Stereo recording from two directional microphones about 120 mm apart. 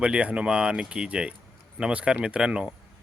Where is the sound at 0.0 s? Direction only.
10° right (ahead or behind).